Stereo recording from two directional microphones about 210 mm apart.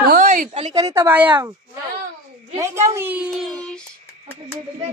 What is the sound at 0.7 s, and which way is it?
Speech, 15° right (ahead or behind).